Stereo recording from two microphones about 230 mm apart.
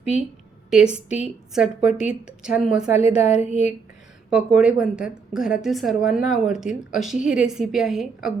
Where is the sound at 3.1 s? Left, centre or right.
Left.